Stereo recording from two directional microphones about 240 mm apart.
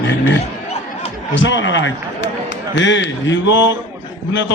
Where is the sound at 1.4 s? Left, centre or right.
Left.